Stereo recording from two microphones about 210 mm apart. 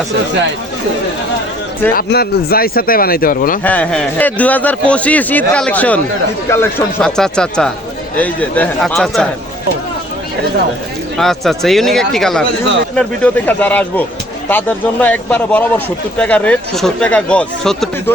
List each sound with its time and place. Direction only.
1.9 s speech: 45° left (ahead or behind)
3.6 s a man's voice: 5° left (ahead or behind)
11.2 s a man's voice: centre (ahead or behind)